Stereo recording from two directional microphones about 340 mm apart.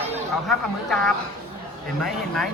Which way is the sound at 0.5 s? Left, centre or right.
Centre.